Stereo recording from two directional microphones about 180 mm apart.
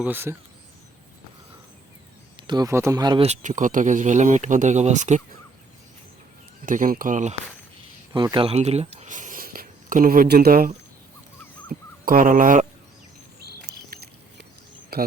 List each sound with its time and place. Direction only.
0.0 s speech: 10° right (ahead or behind)
2.3 s speech: 25° right (ahead or behind)
3.2 s speech: 45° right (ahead or behind)
6.7 s speech: 50° right (ahead or behind)
8.1 s speech: 25° right (ahead or behind); by 10.7 s 55° right (ahead or behind)
12.0 s speech: 50° right (ahead or behind)
14.9 s speech: 60° right (ahead or behind)